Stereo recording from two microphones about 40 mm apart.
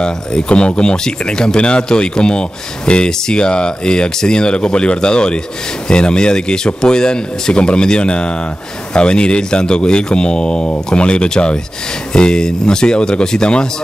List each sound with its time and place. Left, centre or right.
0.0 s speech: left